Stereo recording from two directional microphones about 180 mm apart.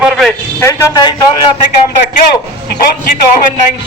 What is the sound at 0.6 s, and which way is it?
Speech, 20° left (ahead or behind).